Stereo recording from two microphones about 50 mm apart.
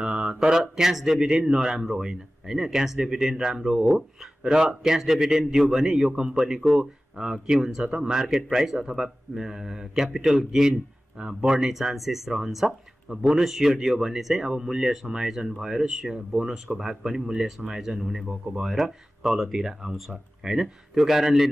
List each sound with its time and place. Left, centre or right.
0.0 s mantra: centre
1.5 s speech: centre
11.7 s speech: centre